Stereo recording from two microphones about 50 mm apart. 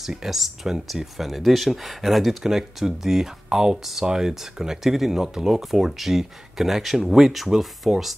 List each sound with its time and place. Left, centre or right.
0.0 s speech: centre